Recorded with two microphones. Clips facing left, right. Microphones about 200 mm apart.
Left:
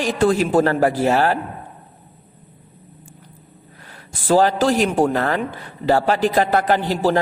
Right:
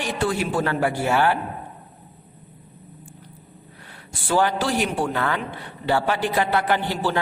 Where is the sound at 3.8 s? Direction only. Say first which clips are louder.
Left 8 dB; 40° left (ahead or behind).